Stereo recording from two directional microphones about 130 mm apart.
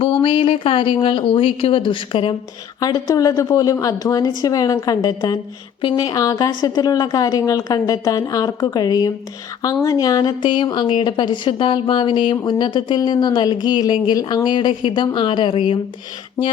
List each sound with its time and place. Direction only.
0.0 s speech: 45° left (ahead or behind)
2.8 s a woman's voice: 30° left (ahead or behind)